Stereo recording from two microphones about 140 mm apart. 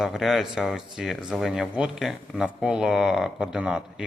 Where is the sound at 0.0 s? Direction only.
Centre (ahead or behind).